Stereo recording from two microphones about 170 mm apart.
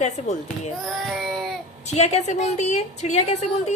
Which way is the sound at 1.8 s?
40° left (ahead or behind).